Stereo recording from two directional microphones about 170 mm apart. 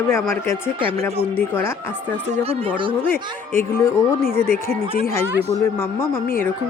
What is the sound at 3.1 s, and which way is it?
Speech, 15° left (ahead or behind).